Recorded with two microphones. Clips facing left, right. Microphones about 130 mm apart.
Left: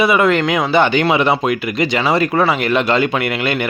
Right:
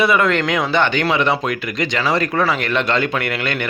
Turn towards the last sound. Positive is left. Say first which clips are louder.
# left 3 dB
turn(degrees=10)  # may be behind; listen again after turning